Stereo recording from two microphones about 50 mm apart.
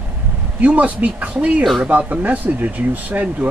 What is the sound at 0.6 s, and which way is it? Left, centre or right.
Speech, right.